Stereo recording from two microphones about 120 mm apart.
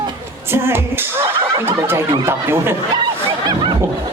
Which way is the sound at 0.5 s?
20° right (ahead or behind).